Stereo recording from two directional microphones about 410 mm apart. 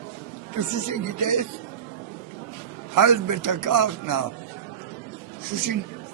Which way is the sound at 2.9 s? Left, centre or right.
Right.